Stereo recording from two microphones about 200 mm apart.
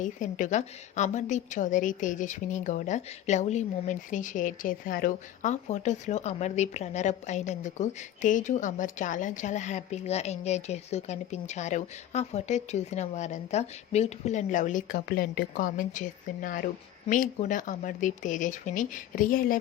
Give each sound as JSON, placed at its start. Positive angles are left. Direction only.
{"t": 0.0, "sound": "a woman's voice", "side_deg": 40}